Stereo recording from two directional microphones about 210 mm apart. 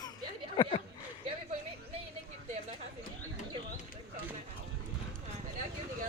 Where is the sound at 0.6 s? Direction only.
30° left (ahead or behind).